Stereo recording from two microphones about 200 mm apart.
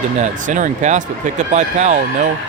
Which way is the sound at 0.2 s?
40° right (ahead or behind).